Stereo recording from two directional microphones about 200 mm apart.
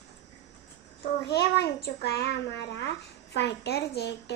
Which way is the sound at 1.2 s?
55° left (ahead or behind).